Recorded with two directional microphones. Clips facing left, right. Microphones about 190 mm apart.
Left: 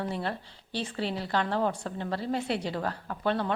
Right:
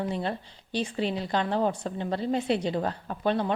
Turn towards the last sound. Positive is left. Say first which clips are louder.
# right 2 dB
turn(degrees=-20)  # may be behind; listen again after turning